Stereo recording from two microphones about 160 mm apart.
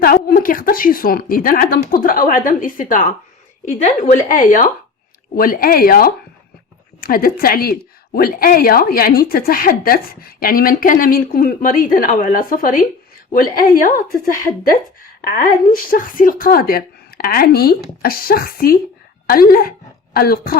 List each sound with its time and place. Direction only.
0.0 s a woman's voice: 70° left (ahead or behind)
3.7 s a woman's voice: 45° left (ahead or behind); by 14.0 s 65° left (ahead or behind)
15.4 s speech: 60° left (ahead or behind)